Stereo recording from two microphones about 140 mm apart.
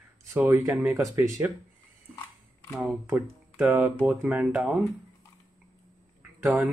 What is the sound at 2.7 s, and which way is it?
Speech, 10° right (ahead or behind).